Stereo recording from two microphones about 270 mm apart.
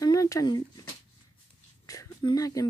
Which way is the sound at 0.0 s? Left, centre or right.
Centre.